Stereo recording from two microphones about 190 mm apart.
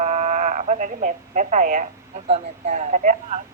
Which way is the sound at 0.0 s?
40° right (ahead or behind).